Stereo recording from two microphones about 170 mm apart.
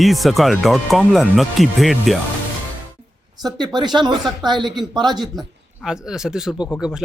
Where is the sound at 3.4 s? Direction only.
25° right (ahead or behind).